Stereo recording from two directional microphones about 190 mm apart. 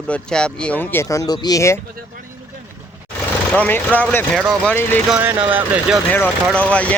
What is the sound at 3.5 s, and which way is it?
Speech, 10° left (ahead or behind).